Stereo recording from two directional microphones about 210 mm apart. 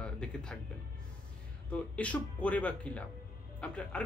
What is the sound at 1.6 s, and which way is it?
Speech, 5° left (ahead or behind).